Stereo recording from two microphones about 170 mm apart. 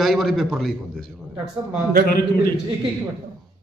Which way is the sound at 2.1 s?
60° left (ahead or behind).